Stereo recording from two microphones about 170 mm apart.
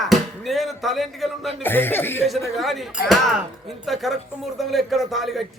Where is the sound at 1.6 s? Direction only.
10° left (ahead or behind).